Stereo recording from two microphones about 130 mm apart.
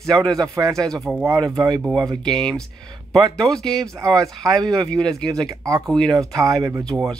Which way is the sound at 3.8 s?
25° right (ahead or behind).